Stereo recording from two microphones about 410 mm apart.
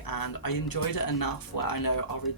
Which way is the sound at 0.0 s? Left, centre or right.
Left.